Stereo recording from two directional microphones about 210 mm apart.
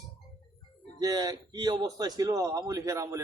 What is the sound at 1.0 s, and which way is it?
A man's voice, 20° right (ahead or behind).